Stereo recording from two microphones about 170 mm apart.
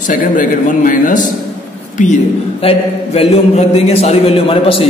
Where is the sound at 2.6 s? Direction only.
35° left (ahead or behind).